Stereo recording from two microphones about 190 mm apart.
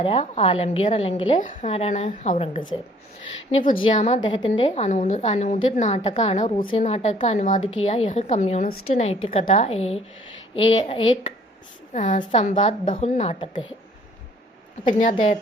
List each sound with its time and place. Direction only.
0.0 s a woman's voice: 30° left (ahead or behind)
3.5 s a woman's voice: 25° left (ahead or behind)
4.2 s a woman's voice: 25° left (ahead or behind)
11.9 s a woman's voice: 40° left (ahead or behind)
14.8 s a woman's voice: 40° left (ahead or behind)